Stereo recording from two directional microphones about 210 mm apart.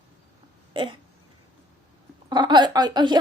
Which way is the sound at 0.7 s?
25° right (ahead or behind).